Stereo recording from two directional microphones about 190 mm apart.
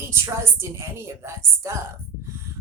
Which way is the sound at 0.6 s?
15° right (ahead or behind).